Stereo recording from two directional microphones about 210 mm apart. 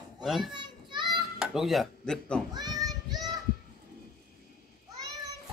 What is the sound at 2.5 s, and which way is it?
Child singing, 20° right (ahead or behind).